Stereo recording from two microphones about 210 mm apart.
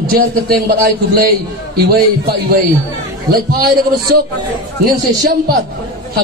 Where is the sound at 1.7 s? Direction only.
45° right (ahead or behind).